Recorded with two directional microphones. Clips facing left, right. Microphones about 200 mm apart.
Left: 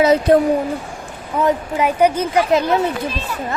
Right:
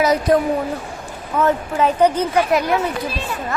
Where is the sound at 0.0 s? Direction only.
25° left (ahead or behind).